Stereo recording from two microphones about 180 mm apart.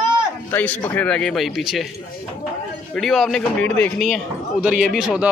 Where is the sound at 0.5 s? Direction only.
10° left (ahead or behind).